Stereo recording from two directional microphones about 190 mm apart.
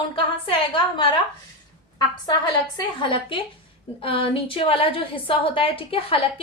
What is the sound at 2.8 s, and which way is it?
A woman's voice, 25° left (ahead or behind).